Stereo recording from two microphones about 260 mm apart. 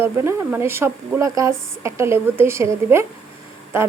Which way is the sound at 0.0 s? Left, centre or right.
Centre.